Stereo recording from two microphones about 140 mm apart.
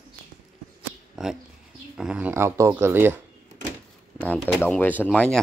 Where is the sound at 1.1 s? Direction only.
5° right (ahead or behind).